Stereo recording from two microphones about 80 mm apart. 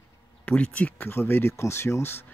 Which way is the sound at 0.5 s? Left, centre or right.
Centre.